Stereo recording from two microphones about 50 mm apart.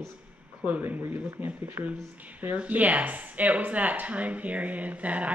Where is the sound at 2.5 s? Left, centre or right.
Right.